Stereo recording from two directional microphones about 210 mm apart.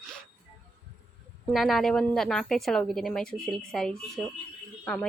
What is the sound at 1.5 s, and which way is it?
A woman's voice, centre (ahead or behind).